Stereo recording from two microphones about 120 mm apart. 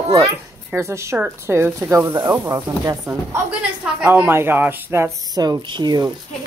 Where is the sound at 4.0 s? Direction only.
15° right (ahead or behind); by 6.1 s 35° right (ahead or behind).